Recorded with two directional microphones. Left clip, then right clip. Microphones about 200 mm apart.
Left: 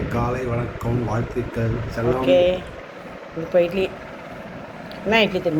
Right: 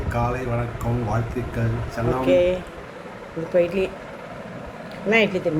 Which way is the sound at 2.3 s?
50° right (ahead or behind).